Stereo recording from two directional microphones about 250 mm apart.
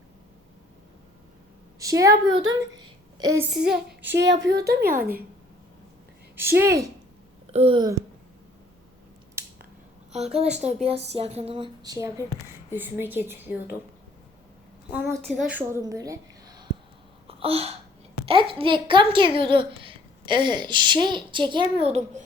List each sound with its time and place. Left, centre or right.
1.8 s a woman's voice: centre
2.5 s a sound: centre
3.5 s child singing: centre
4.2 s a woman's voice: right
6.3 s a woman's voice: centre
10.1 s a woman's voice: right; by 13.7 s centre
15.4 s a woman's voice: centre
17.2 s a sound: right
18.3 s a woman's voice: right